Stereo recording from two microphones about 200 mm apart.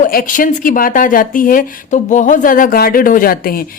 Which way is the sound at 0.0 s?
45° left (ahead or behind).